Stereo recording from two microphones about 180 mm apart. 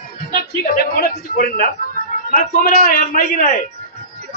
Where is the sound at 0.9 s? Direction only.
60° left (ahead or behind).